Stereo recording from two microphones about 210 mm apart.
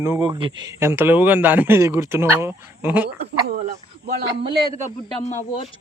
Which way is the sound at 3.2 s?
40° right (ahead or behind).